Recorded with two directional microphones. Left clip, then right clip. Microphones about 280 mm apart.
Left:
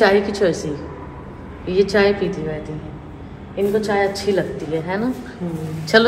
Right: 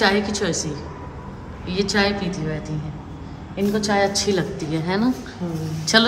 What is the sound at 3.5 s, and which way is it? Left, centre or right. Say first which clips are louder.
A woman's voice: left 3 dB; centre.